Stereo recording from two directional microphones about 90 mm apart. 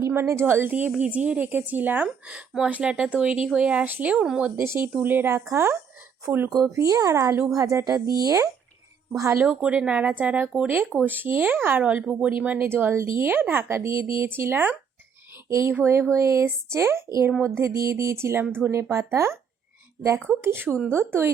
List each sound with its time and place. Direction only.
0.0 s speech: 30° right (ahead or behind)
4.5 s speech: 30° right (ahead or behind)
6.5 s speech: 40° right (ahead or behind)
9.4 s speech: 10° right (ahead or behind); by 19.4 s 30° right (ahead or behind)
20.4 s speech: 25° right (ahead or behind)